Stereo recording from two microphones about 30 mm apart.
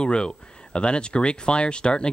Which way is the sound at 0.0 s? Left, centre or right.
Left.